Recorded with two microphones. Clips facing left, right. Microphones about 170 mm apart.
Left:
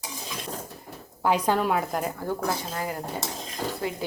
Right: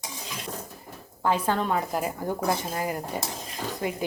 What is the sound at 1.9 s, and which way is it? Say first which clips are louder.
A woman's voice: even; 10° right (ahead or behind).